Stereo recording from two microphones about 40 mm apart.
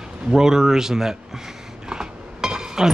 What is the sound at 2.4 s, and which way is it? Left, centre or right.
Chink, centre.